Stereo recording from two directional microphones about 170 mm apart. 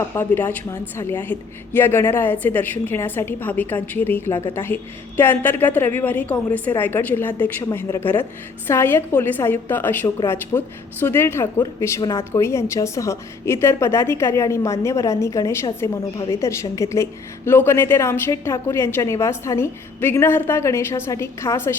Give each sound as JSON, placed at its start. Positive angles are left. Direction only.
{"t": 0.2, "sound": "a woman's voice", "side_deg": 10}